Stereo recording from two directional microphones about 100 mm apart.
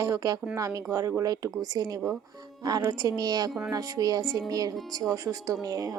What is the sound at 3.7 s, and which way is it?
Speech, 40° right (ahead or behind).